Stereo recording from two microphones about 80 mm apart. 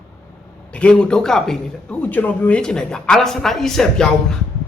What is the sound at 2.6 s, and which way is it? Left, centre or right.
A man's voice, centre.